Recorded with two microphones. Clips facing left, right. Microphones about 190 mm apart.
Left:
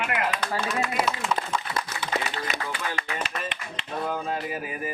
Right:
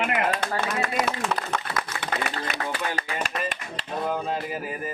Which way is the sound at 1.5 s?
65° right (ahead or behind).